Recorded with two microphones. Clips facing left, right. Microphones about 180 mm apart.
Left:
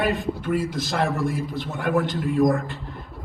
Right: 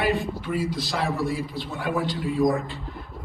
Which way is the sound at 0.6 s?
50° left (ahead or behind).